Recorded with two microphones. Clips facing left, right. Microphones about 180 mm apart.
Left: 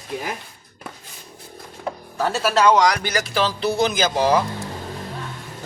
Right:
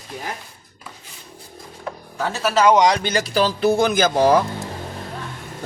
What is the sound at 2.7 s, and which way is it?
Speech, 25° right (ahead or behind).